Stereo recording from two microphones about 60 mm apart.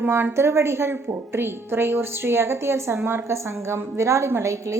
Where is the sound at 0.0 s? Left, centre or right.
Right.